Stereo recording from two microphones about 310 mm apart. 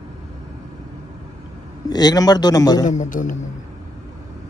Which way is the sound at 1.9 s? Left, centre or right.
Centre.